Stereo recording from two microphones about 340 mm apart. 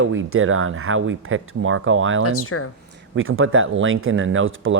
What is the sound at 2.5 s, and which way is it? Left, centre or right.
Speech, left.